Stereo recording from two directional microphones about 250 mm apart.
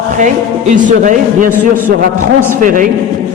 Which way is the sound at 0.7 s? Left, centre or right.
Right.